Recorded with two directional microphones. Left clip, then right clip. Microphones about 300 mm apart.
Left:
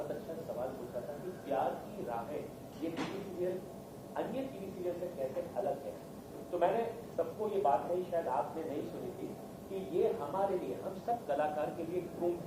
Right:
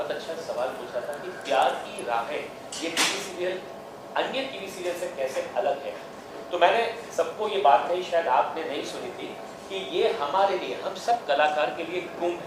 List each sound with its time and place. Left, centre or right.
1.5 s a woman's voice: centre